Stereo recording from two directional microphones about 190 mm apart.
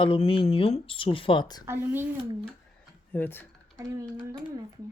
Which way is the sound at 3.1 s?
10° left (ahead or behind).